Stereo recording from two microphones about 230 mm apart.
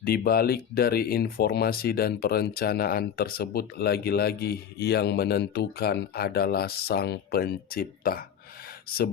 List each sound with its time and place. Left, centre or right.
0.0 s speech: left